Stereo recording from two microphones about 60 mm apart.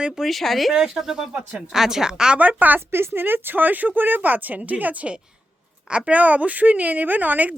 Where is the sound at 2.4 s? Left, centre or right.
Right.